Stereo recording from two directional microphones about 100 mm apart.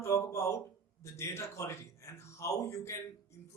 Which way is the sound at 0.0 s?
30° left (ahead or behind).